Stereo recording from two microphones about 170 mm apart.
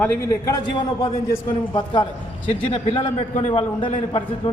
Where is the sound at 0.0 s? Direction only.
10° left (ahead or behind).